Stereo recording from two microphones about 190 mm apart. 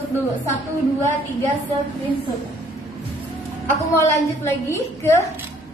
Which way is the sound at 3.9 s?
10° left (ahead or behind).